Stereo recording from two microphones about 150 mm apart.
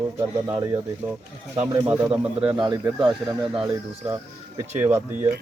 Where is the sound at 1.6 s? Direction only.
10° right (ahead or behind).